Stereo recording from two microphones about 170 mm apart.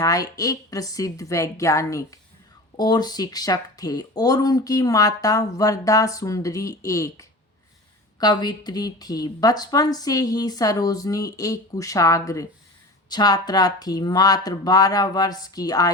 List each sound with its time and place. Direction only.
0.0 s speech: 20° left (ahead or behind)